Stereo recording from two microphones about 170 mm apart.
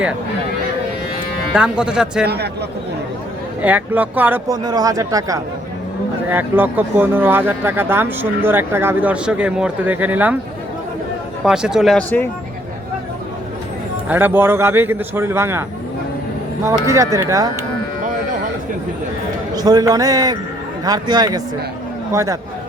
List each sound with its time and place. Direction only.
1.5 s speech: 5° right (ahead or behind)
2.2 s a man's voice: 70° right (ahead or behind)
3.6 s speech: 10° right (ahead or behind)
4.4 s speech: 25° right (ahead or behind)
11.4 s speech: 5° right (ahead or behind)
14.1 s speech: 10° right (ahead or behind)
16.8 s speech: 20° right (ahead or behind)
19.5 s speech: 20° right (ahead or behind)